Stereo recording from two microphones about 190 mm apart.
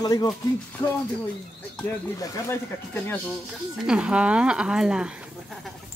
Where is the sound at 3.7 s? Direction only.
5° right (ahead or behind).